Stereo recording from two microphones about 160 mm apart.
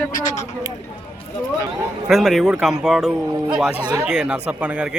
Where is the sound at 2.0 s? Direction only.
Centre (ahead or behind).